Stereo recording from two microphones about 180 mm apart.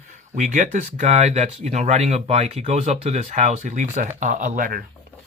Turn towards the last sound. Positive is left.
turn(degrees=-50)  # may be behind; listen again after turning